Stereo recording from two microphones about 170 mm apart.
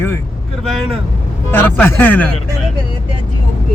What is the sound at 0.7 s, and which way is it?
Speech, centre (ahead or behind).